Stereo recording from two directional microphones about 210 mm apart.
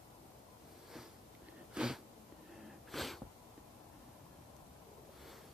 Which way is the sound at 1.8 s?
5° right (ahead or behind).